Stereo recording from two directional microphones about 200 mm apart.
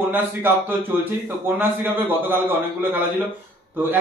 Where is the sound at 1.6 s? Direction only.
10° right (ahead or behind).